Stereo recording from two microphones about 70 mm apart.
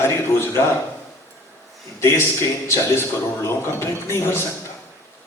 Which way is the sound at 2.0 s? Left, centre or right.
Left.